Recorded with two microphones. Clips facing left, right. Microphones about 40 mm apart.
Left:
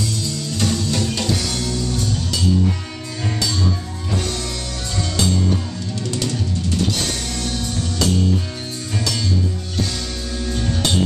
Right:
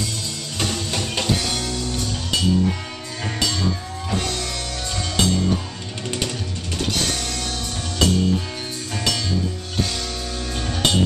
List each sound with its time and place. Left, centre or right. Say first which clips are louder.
0.6 s music: left 3 dB; right
4.2 s music: left 1 dB; centre
6.0 s music: left 1 dB; right
10.4 s music: left 1 dB; centre